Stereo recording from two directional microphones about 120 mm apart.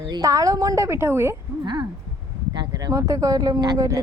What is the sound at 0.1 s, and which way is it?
A woman's voice, 25° right (ahead or behind).